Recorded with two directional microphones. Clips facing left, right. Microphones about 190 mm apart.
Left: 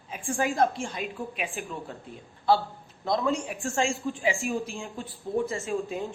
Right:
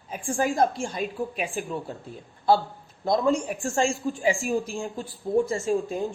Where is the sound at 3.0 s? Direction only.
45° right (ahead or behind).